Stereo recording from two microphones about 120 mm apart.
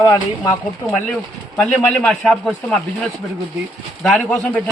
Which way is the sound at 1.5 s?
10° left (ahead or behind).